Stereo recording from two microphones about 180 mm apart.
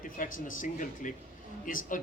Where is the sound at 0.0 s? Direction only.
50° left (ahead or behind).